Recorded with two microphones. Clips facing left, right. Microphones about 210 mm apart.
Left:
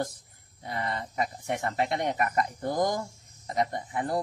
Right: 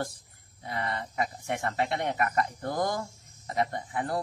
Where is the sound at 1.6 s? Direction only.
15° left (ahead or behind).